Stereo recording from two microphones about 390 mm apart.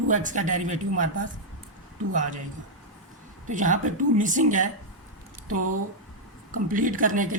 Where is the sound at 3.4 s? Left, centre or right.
Centre.